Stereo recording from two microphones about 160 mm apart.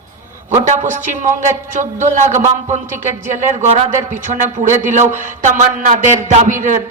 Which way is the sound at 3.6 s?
40° right (ahead or behind).